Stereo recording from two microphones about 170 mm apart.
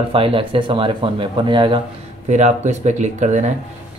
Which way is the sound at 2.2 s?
45° right (ahead or behind).